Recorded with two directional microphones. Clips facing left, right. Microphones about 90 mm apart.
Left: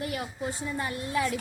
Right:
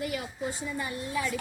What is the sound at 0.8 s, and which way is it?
Speech, 70° left (ahead or behind).